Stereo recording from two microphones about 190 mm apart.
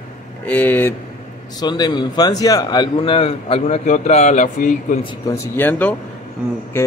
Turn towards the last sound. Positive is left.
turn(degrees=10)  # may be behind; listen again after turning